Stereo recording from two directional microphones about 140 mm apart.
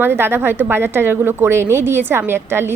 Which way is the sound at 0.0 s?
15° right (ahead or behind).